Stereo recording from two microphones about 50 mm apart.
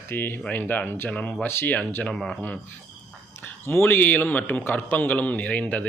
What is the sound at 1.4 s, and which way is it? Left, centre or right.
Speech, left.